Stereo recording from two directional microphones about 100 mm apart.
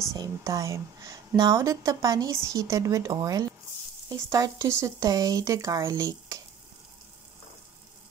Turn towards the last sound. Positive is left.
turn(degrees=-35)  # may be behind; listen again after turning